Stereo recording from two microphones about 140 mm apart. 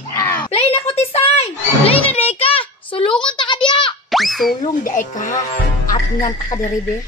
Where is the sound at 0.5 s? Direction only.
45° left (ahead or behind).